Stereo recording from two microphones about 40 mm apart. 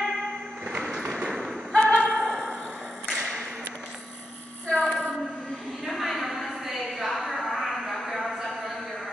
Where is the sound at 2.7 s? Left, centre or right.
Centre.